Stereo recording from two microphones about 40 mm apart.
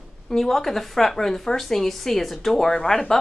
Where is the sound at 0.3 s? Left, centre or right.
Centre.